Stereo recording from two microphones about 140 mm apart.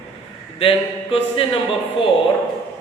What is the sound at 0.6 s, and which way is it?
Speech, 40° left (ahead or behind).